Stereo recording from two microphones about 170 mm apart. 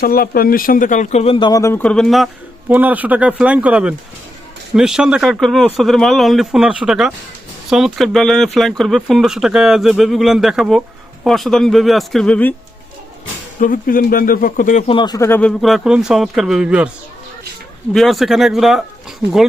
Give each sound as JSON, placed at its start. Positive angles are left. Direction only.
{"t": 0.0, "sound": "speech", "side_deg": 60}
{"t": 13.6, "sound": "speech", "side_deg": 55}
{"t": 14.8, "sound": "speech", "side_deg": 25}
{"t": 17.9, "sound": "speech", "side_deg": 0}